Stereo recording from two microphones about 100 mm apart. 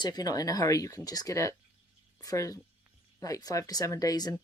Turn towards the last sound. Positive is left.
turn(degrees=40)  # may be behind; listen again after turning